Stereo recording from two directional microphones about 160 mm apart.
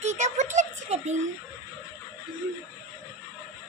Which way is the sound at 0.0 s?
45° right (ahead or behind).